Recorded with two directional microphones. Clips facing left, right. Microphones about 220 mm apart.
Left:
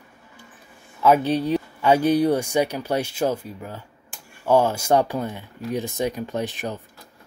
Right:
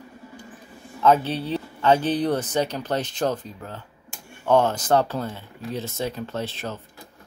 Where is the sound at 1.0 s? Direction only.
10° left (ahead or behind).